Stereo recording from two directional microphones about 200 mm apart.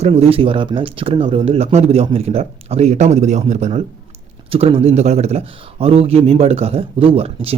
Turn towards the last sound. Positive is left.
turn(degrees=-30)  # may be behind; listen again after turning